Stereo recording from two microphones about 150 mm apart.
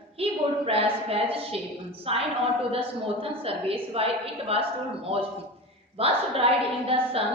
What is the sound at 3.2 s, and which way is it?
A woman's voice, 40° right (ahead or behind).